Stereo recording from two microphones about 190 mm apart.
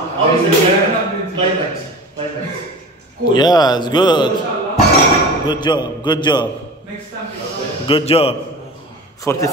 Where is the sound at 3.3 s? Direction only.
20° left (ahead or behind).